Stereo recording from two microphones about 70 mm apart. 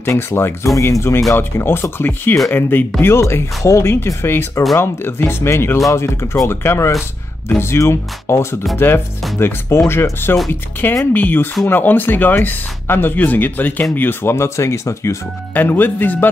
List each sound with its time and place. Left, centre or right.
0.1 s speech: left
10.5 s speech: left
15.5 s speech: left